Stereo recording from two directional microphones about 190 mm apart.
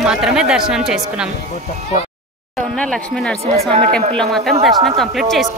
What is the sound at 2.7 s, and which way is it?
Speech, 5° left (ahead or behind).